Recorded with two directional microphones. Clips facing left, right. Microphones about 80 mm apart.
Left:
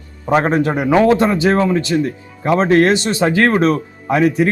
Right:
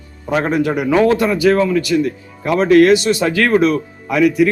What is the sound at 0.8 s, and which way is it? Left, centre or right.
Speech, left.